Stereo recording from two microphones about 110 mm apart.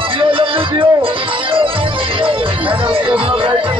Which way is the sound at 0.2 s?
55° right (ahead or behind).